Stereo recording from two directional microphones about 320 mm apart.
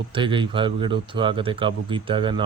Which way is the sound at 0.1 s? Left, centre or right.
Centre.